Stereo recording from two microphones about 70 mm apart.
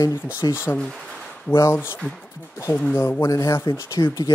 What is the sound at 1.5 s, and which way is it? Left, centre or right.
Speech, left.